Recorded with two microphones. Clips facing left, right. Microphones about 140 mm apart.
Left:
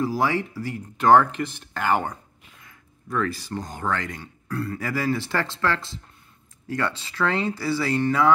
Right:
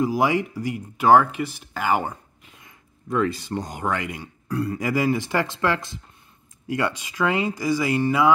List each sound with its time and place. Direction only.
0.0 s speech: 15° right (ahead or behind)
2.6 s speech: 20° right (ahead or behind)